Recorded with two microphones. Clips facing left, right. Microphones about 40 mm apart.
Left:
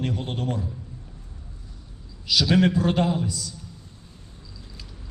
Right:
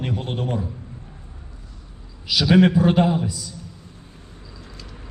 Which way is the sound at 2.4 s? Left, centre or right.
Centre.